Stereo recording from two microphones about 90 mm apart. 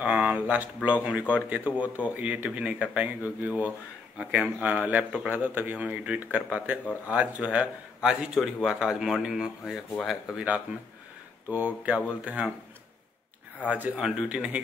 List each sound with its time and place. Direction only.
0.0 s a sound: 15° right (ahead or behind)
0.8 s a man's voice: 15° right (ahead or behind)
10.3 s a man's voice: 15° right (ahead or behind)
13.6 s a man's voice: 15° right (ahead or behind)